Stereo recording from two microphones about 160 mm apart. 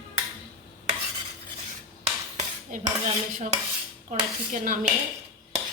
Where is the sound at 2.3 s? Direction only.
45° right (ahead or behind).